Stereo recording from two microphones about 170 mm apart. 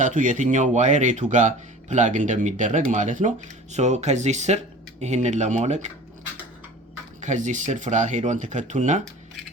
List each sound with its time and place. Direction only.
0.0 s speech: 50° right (ahead or behind)
7.2 s speech: 45° right (ahead or behind)